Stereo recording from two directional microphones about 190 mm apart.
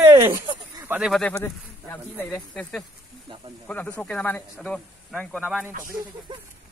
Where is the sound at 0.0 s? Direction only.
20° right (ahead or behind).